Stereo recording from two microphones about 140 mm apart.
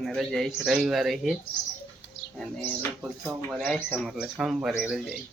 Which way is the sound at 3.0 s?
10° right (ahead or behind).